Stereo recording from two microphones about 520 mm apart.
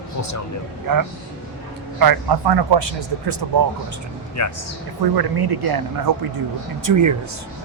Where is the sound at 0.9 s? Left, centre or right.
Right.